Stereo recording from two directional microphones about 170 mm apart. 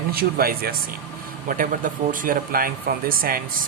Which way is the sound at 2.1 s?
55° right (ahead or behind).